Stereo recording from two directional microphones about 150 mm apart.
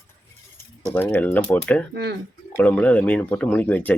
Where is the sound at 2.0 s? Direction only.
90° right.